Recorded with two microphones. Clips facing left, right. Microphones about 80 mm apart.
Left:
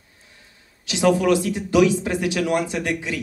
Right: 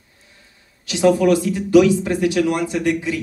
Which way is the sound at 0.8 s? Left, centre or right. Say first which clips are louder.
Right 3 dB; left.